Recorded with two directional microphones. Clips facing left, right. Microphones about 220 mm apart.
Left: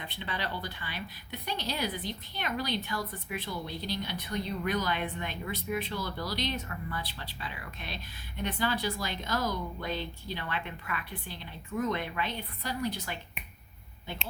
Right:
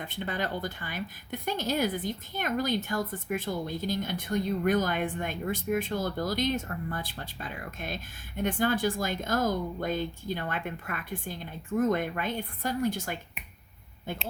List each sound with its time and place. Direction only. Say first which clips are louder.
0.0 s speech: right 5 dB; 45° right (ahead or behind)